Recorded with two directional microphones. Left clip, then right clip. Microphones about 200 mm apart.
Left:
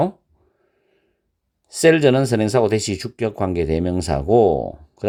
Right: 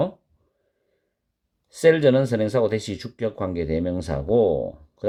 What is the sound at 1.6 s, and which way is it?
Speech, 35° left (ahead or behind).